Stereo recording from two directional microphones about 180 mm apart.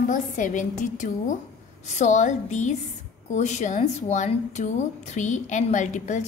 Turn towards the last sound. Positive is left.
turn(degrees=40)  # may be behind; listen again after turning